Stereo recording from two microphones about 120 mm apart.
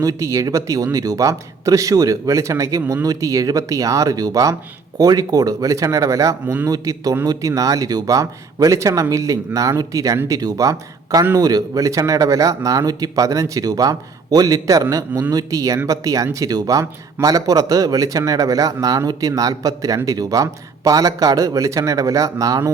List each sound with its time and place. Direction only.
0.0 s speech: 25° right (ahead or behind)